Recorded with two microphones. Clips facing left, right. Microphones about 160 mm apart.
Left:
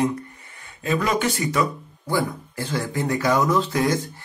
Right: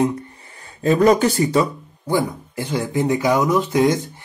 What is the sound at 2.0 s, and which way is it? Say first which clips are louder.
Speech: right 3 dB; 20° right (ahead or behind).